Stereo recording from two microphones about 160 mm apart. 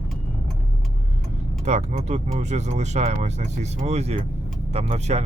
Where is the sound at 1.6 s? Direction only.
45° right (ahead or behind).